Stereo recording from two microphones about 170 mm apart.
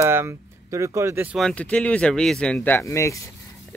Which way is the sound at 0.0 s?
15° right (ahead or behind).